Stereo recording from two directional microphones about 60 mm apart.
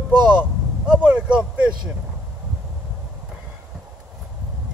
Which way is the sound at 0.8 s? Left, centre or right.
Right.